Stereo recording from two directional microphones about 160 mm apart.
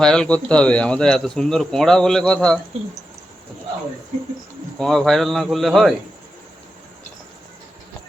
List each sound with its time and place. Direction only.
0.0 s speech: 5° left (ahead or behind)
4.8 s speech: centre (ahead or behind)